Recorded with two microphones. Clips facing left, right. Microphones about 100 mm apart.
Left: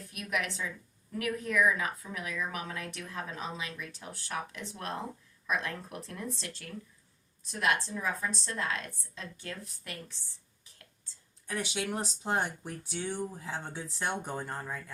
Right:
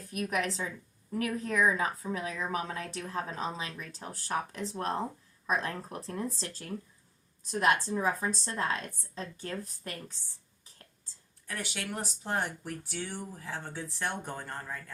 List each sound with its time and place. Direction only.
0.1 s speech: 40° right (ahead or behind)
11.4 s speech: 20° left (ahead or behind)